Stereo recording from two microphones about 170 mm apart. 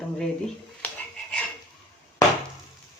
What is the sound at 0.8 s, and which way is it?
Dog, 10° left (ahead or behind).